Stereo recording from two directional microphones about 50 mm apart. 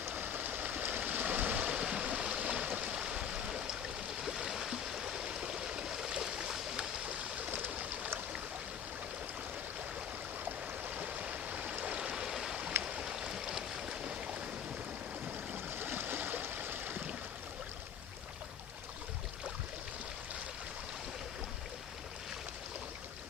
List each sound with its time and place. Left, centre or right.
0.1 s stream: right
2.8 s stream: centre
7.3 s stream: right
10.4 s stream: right; by 12.5 s centre
12.8 s boat: right
15.5 s stream: right